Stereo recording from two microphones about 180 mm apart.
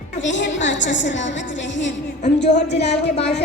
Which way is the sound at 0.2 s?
85° left.